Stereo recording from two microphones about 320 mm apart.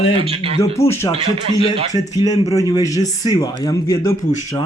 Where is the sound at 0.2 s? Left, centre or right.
Centre.